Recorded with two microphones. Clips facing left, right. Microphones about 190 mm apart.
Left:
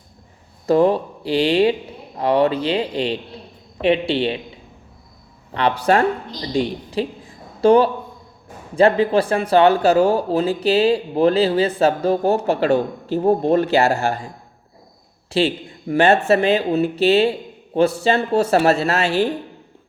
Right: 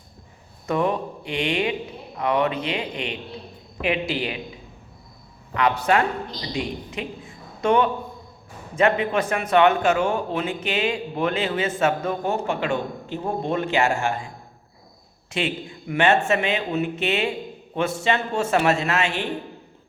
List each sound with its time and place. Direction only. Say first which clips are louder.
0.7 s speech: left 8 dB; 30° left (ahead or behind)
5.5 s speech: left 3 dB; 30° left (ahead or behind)
15.3 s speech: left 7 dB; 35° left (ahead or behind)